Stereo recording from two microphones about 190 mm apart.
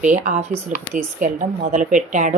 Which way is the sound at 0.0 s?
40° right (ahead or behind).